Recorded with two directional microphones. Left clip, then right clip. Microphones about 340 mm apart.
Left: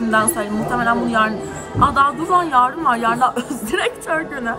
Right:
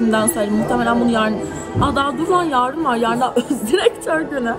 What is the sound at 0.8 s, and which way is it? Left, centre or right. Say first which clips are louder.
Speech: left 2 dB; centre.